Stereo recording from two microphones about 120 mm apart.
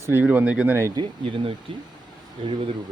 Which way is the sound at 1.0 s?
45° right (ahead or behind).